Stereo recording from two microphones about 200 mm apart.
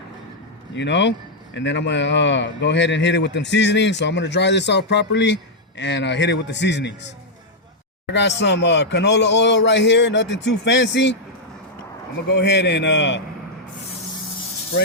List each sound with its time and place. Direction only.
0.7 s a man's voice: 60° left (ahead or behind)
12.3 s a man's voice: 60° left (ahead or behind)